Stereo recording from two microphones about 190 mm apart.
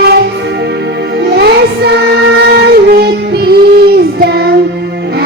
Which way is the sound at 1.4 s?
60° right (ahead or behind).